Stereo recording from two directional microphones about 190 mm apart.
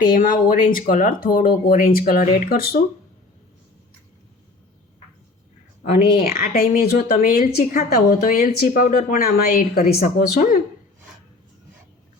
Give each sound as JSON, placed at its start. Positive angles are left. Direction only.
{"t": 0.0, "sound": "speech", "side_deg": 45}
{"t": 6.1, "sound": "speech", "side_deg": 50}
{"t": 6.5, "sound": "speech", "side_deg": 40}